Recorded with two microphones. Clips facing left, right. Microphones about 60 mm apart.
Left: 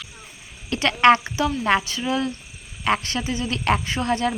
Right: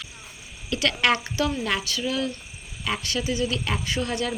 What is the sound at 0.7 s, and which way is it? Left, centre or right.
A woman's voice, left.